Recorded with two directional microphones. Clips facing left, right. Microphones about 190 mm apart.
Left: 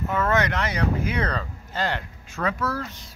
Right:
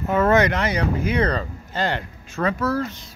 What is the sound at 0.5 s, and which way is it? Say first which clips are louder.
Speech: right 3 dB; centre (ahead or behind).